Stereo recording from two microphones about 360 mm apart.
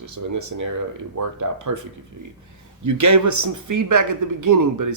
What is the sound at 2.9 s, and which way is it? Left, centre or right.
A man's voice, right.